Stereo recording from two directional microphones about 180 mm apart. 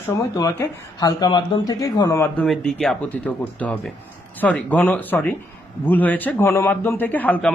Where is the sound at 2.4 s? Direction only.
Centre (ahead or behind).